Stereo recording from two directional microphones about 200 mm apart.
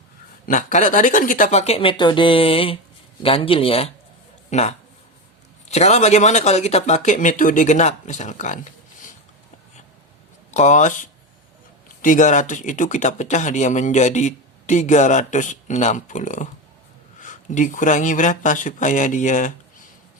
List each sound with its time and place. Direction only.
0.4 s speech: 40° left (ahead or behind)
5.7 s speech: 35° left (ahead or behind)
10.5 s speech: 35° left (ahead or behind)